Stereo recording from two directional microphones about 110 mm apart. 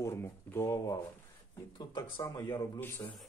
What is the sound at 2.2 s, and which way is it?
Speech, 35° left (ahead or behind).